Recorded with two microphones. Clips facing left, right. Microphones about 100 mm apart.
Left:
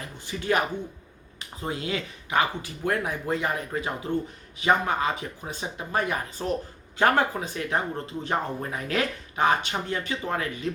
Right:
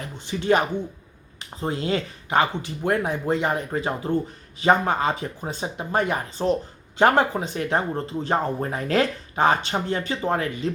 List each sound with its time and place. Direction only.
0.3 s speech: 25° right (ahead or behind)
1.6 s speech: 30° right (ahead or behind)